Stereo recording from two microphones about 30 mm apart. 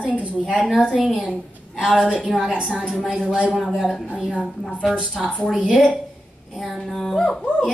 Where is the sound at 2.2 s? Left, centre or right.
Centre.